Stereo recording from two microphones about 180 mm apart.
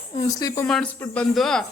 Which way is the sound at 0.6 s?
5° left (ahead or behind).